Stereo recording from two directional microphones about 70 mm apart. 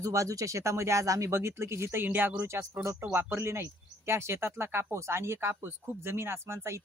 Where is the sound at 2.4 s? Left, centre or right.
Right.